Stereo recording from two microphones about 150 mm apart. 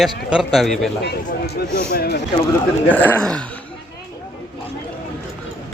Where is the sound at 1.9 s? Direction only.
90° left.